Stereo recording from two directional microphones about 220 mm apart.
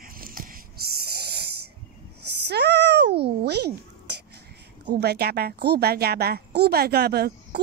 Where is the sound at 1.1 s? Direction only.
45° right (ahead or behind).